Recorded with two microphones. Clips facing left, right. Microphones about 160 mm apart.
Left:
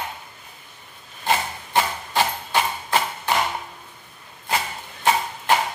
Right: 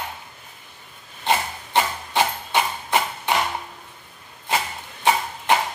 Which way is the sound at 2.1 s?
20° right (ahead or behind).